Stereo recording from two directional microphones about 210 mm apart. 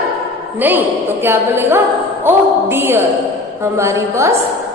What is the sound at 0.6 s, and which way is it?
A woman's voice, 10° right (ahead or behind).